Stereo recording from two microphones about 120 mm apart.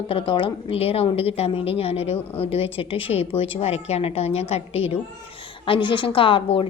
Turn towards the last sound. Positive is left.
turn(degrees=45)  # may be behind; listen again after turning